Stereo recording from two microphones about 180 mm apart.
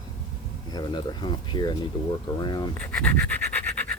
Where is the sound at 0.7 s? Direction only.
25° left (ahead or behind).